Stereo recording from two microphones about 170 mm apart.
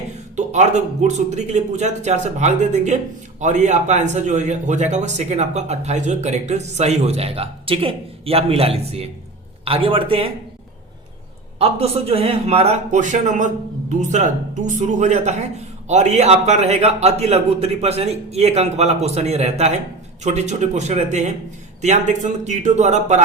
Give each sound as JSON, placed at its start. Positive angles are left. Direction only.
{"t": 0.3, "sound": "a man's voice", "side_deg": -45}
{"t": 11.6, "sound": "a man's voice", "side_deg": -35}